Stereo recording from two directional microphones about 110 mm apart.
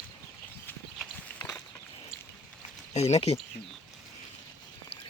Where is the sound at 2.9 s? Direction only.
70° left (ahead or behind).